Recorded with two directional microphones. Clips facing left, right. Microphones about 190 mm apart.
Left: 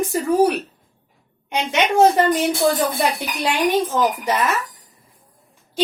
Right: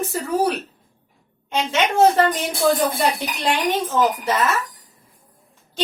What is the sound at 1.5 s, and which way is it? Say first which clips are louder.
Speech: left 2 dB; 15° left (ahead or behind).